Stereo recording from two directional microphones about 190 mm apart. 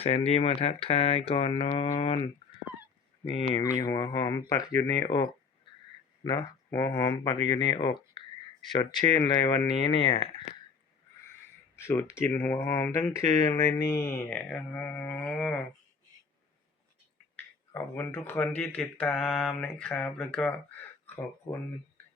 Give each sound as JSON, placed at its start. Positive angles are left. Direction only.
{"t": 0.0, "sound": "speech", "side_deg": 35}
{"t": 3.5, "sound": "speech", "side_deg": 15}
{"t": 11.8, "sound": "speech", "side_deg": 15}
{"t": 17.7, "sound": "speech", "side_deg": 15}